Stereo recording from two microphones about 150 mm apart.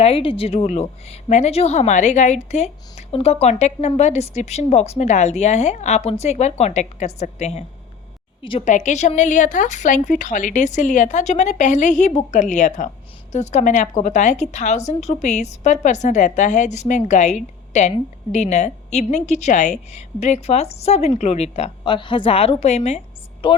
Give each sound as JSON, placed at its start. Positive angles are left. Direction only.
{"t": 0.0, "sound": "a woman's voice", "side_deg": 40}
{"t": 8.4, "sound": "a woman's voice", "side_deg": 35}
{"t": 8.6, "sound": "a woman's voice", "side_deg": 50}
{"t": 23.4, "sound": "speech", "side_deg": 35}